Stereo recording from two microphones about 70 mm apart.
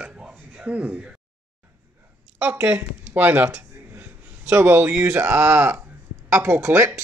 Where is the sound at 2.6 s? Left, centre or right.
Right.